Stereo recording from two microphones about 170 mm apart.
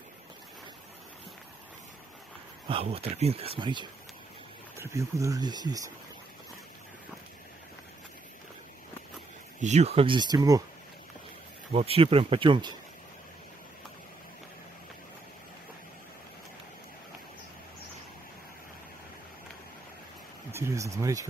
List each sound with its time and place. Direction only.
2.7 s speech: 35° right (ahead or behind)
9.6 s speech: 40° right (ahead or behind)
10.3 s speech: 20° right (ahead or behind)
11.7 s speech: 35° right (ahead or behind)
20.5 s speech: 15° right (ahead or behind)